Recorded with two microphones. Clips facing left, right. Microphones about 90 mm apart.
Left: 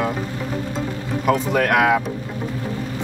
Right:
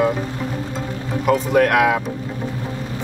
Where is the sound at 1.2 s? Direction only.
Centre (ahead or behind).